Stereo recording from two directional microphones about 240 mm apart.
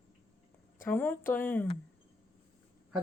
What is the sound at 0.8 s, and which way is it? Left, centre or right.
Speech, centre.